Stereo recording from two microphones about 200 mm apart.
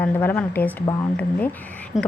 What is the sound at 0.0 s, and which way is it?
Speech, 10° left (ahead or behind).